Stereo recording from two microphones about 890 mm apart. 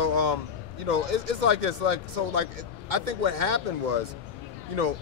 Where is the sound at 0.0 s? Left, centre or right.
Right.